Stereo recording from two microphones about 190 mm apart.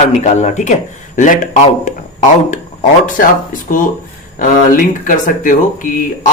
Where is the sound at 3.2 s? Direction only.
50° left (ahead or behind).